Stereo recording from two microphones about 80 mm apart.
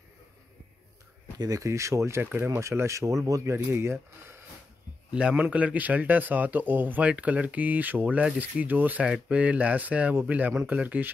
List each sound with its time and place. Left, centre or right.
1.4 s speech: right
5.3 s speech: centre